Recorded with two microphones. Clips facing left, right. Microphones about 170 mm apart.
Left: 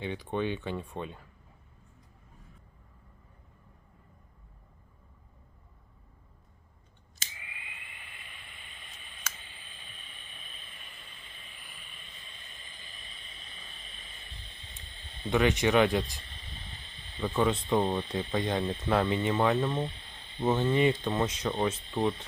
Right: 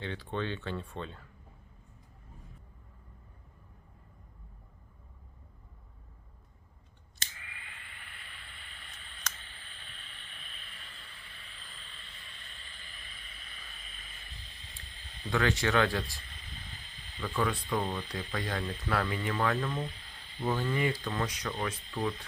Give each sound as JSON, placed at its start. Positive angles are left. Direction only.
{"t": 0.0, "sound": "speech", "side_deg": 15}
{"t": 7.3, "sound": "vehicle", "side_deg": 15}